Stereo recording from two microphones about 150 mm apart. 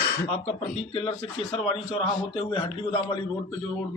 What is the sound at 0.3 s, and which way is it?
Speech, 40° left (ahead or behind).